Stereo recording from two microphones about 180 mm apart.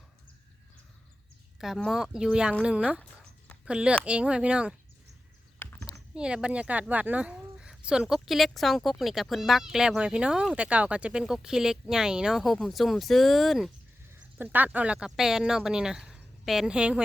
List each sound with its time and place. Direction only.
1.5 s speech: centre (ahead or behind)
5.5 s a sound: 15° left (ahead or behind)
6.1 s speech: 5° right (ahead or behind)